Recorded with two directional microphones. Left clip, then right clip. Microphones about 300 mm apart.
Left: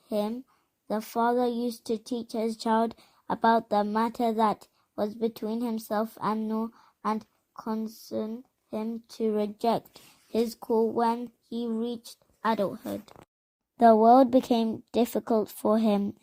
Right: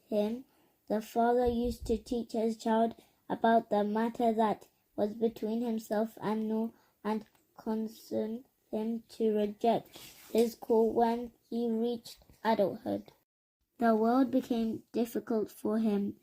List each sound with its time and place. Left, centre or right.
0.1 s speech: left